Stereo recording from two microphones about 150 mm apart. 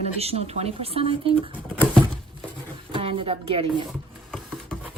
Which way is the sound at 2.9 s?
35° right (ahead or behind).